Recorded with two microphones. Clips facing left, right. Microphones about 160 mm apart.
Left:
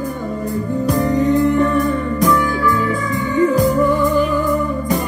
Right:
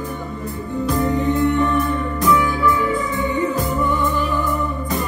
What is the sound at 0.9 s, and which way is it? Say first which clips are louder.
Music: left 4 dB; 40° left (ahead or behind).